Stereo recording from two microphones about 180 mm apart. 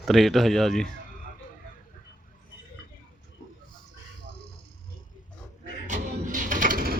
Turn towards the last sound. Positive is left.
turn(degrees=-55)  # may be behind; listen again after turning